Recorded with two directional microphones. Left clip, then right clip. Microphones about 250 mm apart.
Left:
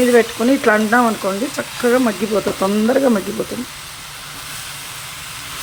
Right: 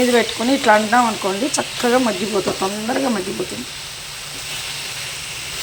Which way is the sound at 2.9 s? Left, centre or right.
Left.